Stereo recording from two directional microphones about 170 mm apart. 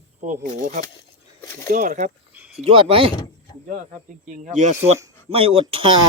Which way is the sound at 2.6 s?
35° right (ahead or behind).